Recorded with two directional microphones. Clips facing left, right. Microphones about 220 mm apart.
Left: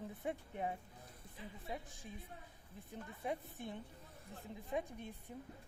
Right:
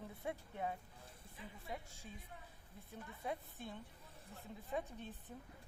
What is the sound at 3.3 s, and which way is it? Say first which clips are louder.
A woman's voice: left 3 dB; 20° left (ahead or behind).